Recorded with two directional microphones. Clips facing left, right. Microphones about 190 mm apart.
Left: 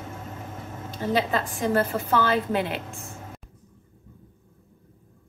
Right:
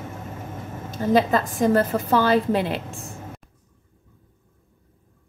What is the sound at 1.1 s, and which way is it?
A woman's voice, 40° right (ahead or behind).